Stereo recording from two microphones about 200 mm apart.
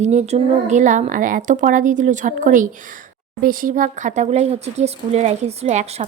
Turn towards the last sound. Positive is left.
turn(degrees=-35)  # may be behind; listen again after turning